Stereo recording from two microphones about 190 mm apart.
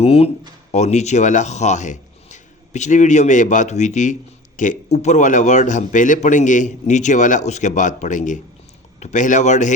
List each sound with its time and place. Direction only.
0.0 s speech: 30° left (ahead or behind)